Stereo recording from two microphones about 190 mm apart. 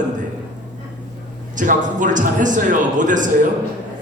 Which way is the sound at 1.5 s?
45° right (ahead or behind).